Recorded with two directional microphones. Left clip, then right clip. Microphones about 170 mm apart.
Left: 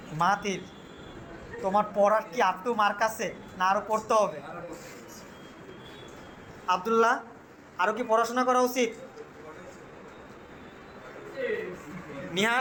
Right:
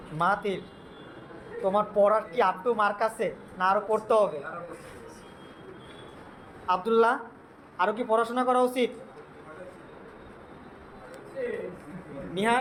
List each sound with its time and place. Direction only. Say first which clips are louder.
0.2 s speech: even; 10° right (ahead or behind)
1.6 s speech: right 1 dB; 15° right (ahead or behind)
6.7 s speech: right 1 dB; 10° right (ahead or behind)
12.3 s a man's voice: right 1 dB; centre (ahead or behind)